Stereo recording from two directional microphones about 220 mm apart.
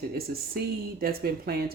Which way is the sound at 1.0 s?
45° right (ahead or behind).